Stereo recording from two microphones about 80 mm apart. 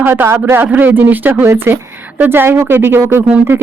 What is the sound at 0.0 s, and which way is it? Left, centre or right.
Speech, right.